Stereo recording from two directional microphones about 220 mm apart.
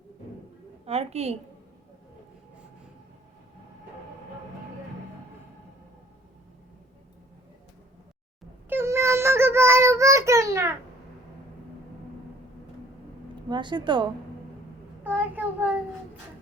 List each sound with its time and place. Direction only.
0.9 s a woman's voice: 30° right (ahead or behind)
8.7 s child singing: 10° right (ahead or behind)
13.5 s a woman's voice: 20° right (ahead or behind)
15.0 s a child's voice: 10° right (ahead or behind)